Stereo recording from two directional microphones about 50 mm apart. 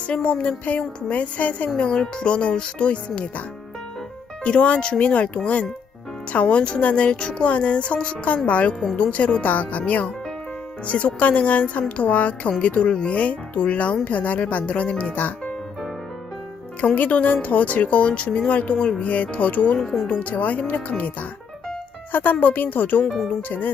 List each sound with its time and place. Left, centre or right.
0.1 s speech: left
4.4 s speech: left
16.8 s speech: left
19.8 s speech: centre
20.1 s speech: left
22.1 s speech: left
23.0 s speech: centre
23.5 s speech: left